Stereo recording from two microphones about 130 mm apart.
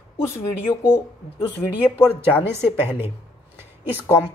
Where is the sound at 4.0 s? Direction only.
20° left (ahead or behind).